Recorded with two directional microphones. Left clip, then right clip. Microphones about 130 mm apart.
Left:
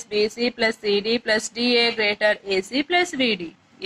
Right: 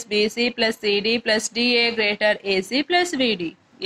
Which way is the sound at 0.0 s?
35° right (ahead or behind).